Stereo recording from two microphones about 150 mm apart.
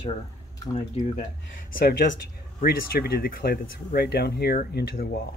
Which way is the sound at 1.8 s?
60° left (ahead or behind).